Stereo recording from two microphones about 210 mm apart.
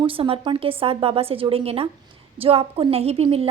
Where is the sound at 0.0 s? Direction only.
25° right (ahead or behind).